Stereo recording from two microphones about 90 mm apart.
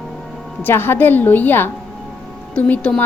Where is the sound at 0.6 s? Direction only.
25° left (ahead or behind).